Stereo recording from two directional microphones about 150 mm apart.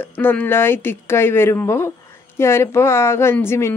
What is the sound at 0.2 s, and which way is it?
Speech, 10° left (ahead or behind).